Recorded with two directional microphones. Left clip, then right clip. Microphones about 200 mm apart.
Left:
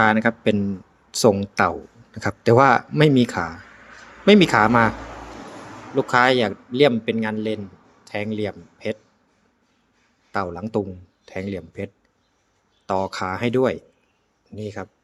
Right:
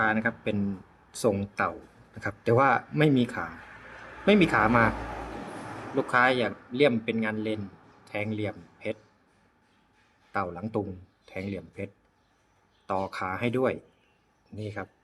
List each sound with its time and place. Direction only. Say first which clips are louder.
0.0 s a man's voice: left 9 dB; 30° left (ahead or behind)
6.0 s a man's voice: left 6 dB; 25° left (ahead or behind)
10.3 s a man's voice: left 6 dB; 25° left (ahead or behind)